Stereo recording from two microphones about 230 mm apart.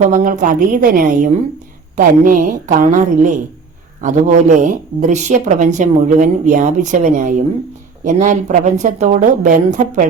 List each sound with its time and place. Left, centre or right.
0.0 s a woman's voice: right